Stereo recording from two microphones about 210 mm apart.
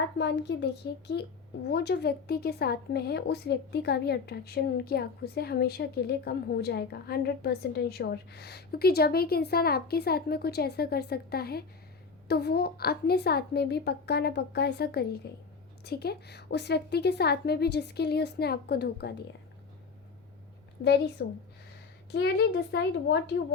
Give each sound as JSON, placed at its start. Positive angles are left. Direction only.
{"t": 0.2, "sound": "a woman's voice", "side_deg": 55}
{"t": 21.2, "sound": "a woman's voice", "side_deg": 50}